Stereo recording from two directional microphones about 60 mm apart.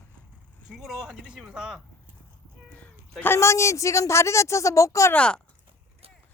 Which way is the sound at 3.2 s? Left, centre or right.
Left.